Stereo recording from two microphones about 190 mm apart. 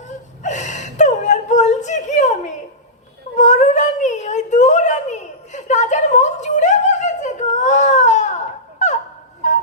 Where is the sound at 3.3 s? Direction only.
40° left (ahead or behind).